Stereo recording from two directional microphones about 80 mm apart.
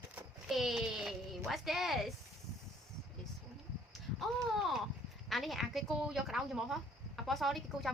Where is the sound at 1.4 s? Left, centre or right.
Centre.